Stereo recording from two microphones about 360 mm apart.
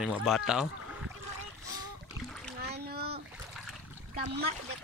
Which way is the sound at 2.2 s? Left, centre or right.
Centre.